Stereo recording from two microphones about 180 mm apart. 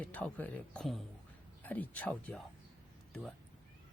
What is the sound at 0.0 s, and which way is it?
Speech, 10° left (ahead or behind).